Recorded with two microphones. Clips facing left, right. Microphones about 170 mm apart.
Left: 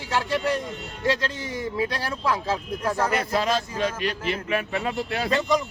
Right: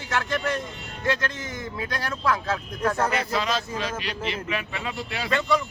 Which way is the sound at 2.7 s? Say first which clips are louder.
Right 2 dB; 10° left (ahead or behind).